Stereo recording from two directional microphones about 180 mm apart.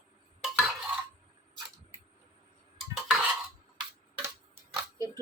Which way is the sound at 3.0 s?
5° right (ahead or behind).